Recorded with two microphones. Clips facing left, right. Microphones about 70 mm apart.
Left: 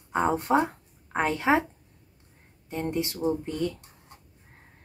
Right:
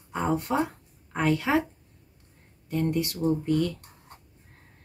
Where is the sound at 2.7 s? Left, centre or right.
Left.